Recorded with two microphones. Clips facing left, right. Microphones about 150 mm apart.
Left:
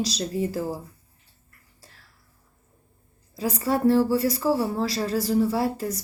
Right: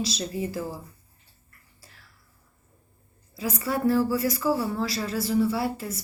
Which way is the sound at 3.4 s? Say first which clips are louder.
Left 4 dB; 35° left (ahead or behind).